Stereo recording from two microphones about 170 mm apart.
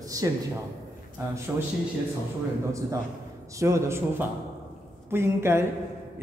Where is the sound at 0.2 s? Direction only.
20° right (ahead or behind).